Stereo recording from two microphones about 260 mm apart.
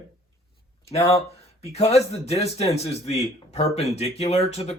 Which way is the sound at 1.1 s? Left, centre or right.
Left.